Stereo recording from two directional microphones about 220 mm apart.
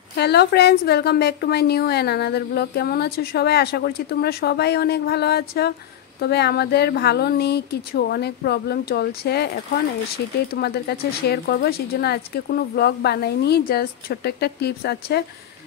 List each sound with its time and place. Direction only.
0.1 s a woman's voice: 50° left (ahead or behind)